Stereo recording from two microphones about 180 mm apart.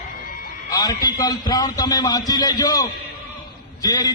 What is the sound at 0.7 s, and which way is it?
A man's voice, 20° left (ahead or behind).